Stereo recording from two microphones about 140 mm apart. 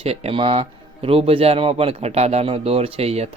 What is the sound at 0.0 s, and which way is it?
Speech, 45° right (ahead or behind).